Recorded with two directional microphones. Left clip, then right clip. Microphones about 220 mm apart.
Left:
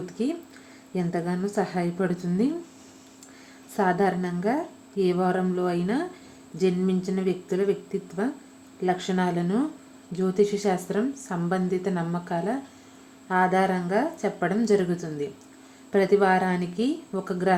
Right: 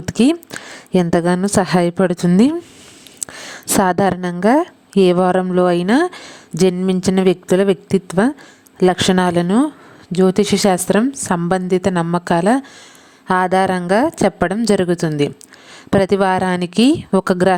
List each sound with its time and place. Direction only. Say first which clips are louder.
0.2 s a woman's voice: right 15 dB; 55° right (ahead or behind)